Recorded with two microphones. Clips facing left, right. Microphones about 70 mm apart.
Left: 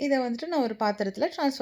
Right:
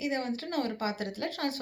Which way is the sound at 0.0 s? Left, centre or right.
Left.